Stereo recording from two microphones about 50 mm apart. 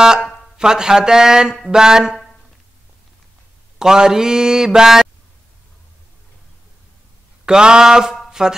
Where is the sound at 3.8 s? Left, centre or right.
Centre.